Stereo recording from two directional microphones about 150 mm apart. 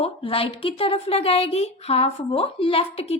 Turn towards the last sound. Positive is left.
turn(degrees=40)  # may be behind; listen again after turning